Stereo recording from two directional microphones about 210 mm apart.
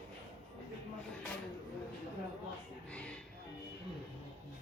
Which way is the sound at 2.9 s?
5° left (ahead or behind).